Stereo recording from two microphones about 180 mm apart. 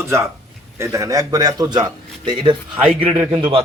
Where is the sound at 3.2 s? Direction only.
10° right (ahead or behind).